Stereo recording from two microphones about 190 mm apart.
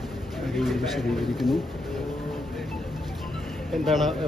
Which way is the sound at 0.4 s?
Centre (ahead or behind).